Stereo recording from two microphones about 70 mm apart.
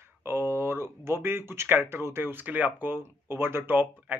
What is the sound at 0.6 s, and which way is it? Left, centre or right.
Speech, right.